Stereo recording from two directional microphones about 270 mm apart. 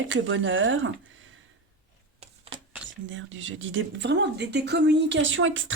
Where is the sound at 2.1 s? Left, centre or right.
Right.